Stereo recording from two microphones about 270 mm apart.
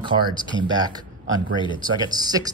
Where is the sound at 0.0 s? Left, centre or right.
Centre.